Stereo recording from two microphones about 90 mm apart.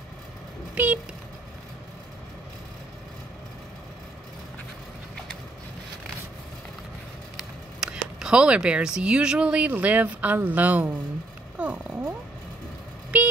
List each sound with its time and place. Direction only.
0.8 s vehicle: 10° right (ahead or behind)
7.3 s speech: 10° right (ahead or behind)
11.5 s a sound: 15° right (ahead or behind)